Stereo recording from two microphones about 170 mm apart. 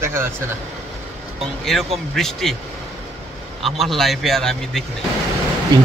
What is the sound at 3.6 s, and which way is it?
A man's voice, centre (ahead or behind).